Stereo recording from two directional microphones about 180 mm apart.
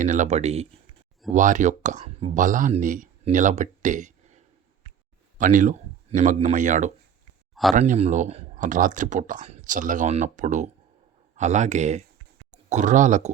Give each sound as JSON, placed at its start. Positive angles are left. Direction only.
{"t": 0.0, "sound": "speech", "side_deg": -45}
{"t": 7.5, "sound": "a sound", "side_deg": 0}
{"t": 7.8, "sound": "speech", "side_deg": -40}